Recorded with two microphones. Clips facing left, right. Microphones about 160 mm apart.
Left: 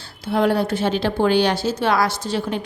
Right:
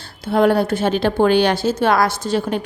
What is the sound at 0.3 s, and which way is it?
A woman's voice, 50° right (ahead or behind).